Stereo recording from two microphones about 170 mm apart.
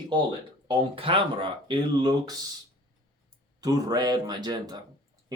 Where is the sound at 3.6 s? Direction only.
20° right (ahead or behind).